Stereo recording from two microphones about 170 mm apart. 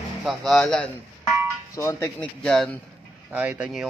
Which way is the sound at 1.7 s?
15° left (ahead or behind).